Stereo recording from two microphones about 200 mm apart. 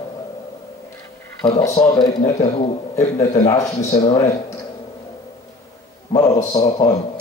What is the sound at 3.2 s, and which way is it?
Speech, 15° left (ahead or behind).